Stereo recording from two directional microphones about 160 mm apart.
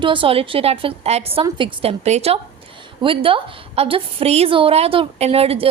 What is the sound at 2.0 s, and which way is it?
A woman's voice, 40° right (ahead or behind).